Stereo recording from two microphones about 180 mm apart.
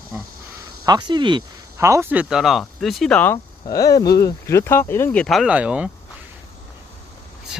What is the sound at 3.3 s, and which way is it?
Speech, 20° left (ahead or behind).